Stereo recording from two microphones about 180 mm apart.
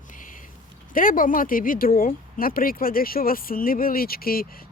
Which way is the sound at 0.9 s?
50° left (ahead or behind).